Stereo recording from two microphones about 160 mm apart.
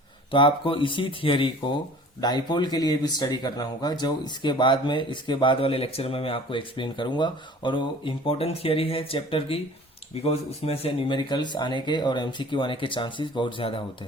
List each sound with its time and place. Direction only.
0.3 s speech: 30° left (ahead or behind)